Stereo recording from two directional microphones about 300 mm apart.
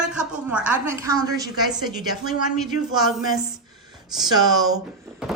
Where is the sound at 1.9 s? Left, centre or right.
Left.